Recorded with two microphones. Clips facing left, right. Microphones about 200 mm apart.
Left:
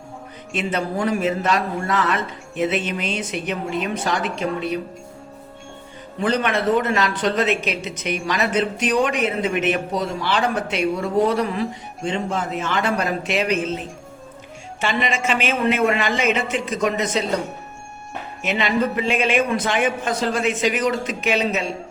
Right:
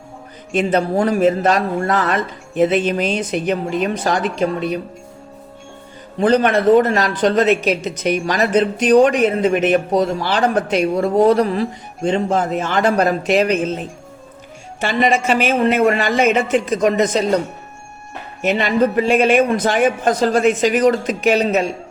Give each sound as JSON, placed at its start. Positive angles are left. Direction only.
{"t": 0.5, "sound": "speech", "side_deg": -35}
{"t": 6.1, "sound": "speech", "side_deg": -35}
{"t": 14.8, "sound": "a man's voice", "side_deg": -45}
{"t": 18.4, "sound": "a man's voice", "side_deg": -45}